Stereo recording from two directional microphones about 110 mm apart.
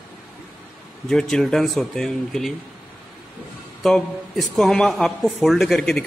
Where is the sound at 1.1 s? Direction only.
5° left (ahead or behind).